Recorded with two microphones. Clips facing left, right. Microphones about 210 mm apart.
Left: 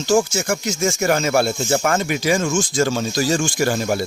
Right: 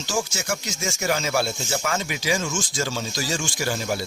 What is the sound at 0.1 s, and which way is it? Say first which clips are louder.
Speech: left 9 dB; 50° left (ahead or behind).